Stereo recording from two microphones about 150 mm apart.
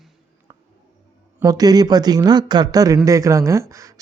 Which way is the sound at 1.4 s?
25° right (ahead or behind).